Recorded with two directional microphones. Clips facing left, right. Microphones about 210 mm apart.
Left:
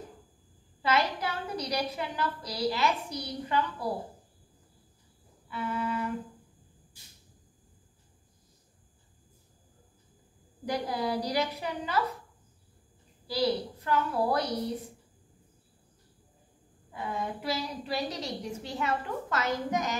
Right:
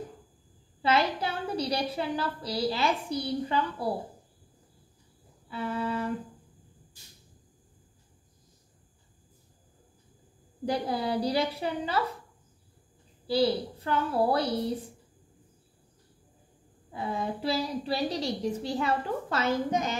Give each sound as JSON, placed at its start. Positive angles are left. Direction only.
{"t": 0.8, "sound": "a woman's voice", "side_deg": -30}
{"t": 5.5, "sound": "a woman's voice", "side_deg": -30}
{"t": 10.6, "sound": "a woman's voice", "side_deg": -30}
{"t": 13.3, "sound": "a woman's voice", "side_deg": -30}
{"t": 16.9, "sound": "a woman's voice", "side_deg": -30}